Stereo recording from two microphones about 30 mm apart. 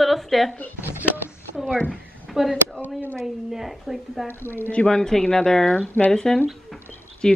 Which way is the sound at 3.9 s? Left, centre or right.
Centre.